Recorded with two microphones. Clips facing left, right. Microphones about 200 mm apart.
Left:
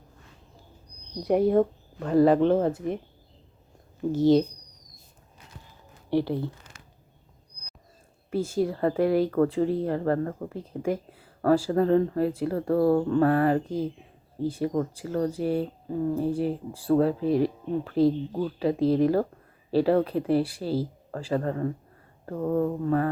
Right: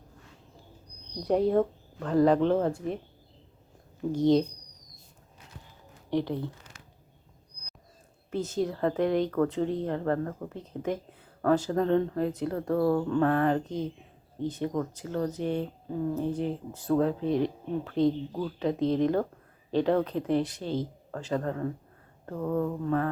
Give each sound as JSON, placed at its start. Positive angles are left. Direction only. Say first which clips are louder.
{"t": 1.2, "sound": "speech", "louder": "left 3 dB", "side_deg": 10}
{"t": 4.1, "sound": "speech", "louder": "left 3 dB", "side_deg": 5}
{"t": 6.1, "sound": "speech", "louder": "left 3 dB", "side_deg": 10}
{"t": 8.3, "sound": "speech", "louder": "left 3 dB", "side_deg": 10}
{"t": 9.3, "sound": "speech", "louder": "left 4 dB", "side_deg": 15}
{"t": 12.7, "sound": "speech", "louder": "left 4 dB", "side_deg": 30}
{"t": 13.1, "sound": "speech", "louder": "left 3 dB", "side_deg": 10}
{"t": 22.4, "sound": "speech", "louder": "left 4 dB", "side_deg": 25}